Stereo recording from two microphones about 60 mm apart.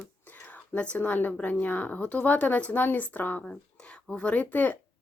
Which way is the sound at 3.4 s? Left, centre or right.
Centre.